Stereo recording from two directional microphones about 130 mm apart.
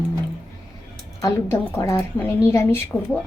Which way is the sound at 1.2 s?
25° left (ahead or behind).